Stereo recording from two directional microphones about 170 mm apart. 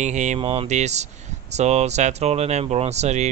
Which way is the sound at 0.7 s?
40° right (ahead or behind).